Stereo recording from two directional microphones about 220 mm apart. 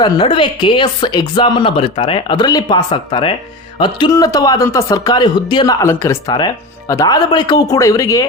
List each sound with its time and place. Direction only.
0.0 s speech: 20° left (ahead or behind)